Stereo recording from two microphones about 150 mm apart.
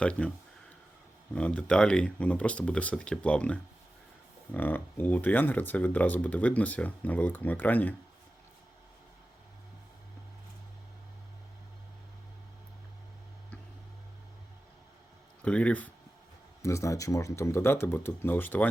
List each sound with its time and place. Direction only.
0.0 s speech: 5° left (ahead or behind)
15.4 s speech: 10° left (ahead or behind)
16.6 s speech: 20° left (ahead or behind)